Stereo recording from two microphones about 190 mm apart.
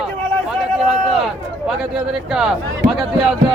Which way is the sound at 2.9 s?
Centre (ahead or behind).